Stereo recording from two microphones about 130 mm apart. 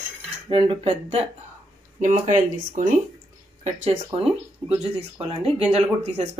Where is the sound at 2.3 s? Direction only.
75° right (ahead or behind).